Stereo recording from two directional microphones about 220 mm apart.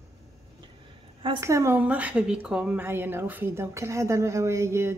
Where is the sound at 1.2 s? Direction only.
15° right (ahead or behind).